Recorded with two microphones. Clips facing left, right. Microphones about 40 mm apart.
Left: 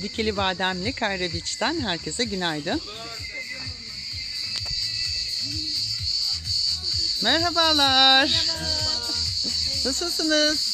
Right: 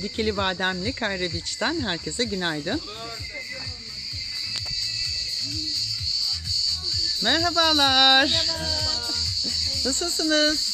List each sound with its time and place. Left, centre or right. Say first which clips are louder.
0.0 s speech: even; centre
7.2 s speech: even; centre